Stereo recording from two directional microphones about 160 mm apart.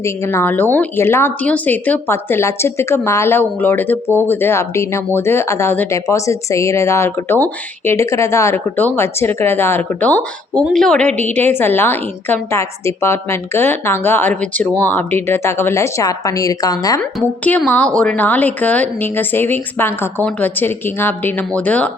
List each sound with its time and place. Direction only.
0.0 s a woman's voice: 15° left (ahead or behind)
17.0 s speech: 10° left (ahead or behind)